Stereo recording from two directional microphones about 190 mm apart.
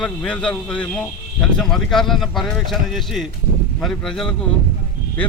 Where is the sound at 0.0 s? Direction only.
5° left (ahead or behind).